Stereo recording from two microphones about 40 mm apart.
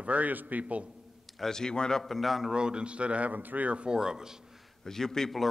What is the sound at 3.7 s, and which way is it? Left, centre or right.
Speech, right.